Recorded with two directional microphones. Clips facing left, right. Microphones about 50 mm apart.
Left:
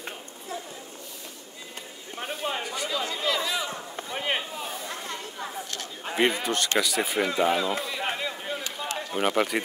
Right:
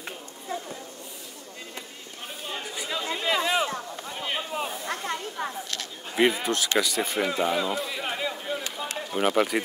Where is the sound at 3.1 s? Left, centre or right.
Right.